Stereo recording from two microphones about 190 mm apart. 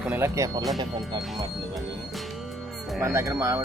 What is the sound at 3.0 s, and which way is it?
Speech, 15° right (ahead or behind).